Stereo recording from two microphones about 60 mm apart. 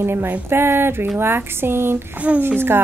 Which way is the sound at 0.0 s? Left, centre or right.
Right.